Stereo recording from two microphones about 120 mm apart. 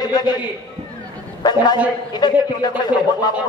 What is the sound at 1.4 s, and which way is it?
A man's voice, 35° left (ahead or behind).